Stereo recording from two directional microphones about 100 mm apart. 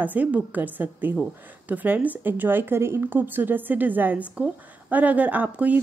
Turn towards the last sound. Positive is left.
turn(degrees=-15)  # may be behind; listen again after turning